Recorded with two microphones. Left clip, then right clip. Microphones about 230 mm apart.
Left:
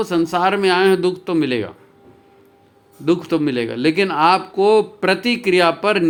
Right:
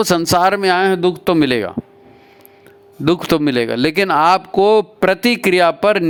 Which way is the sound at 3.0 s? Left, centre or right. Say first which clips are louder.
Right 3 dB; right.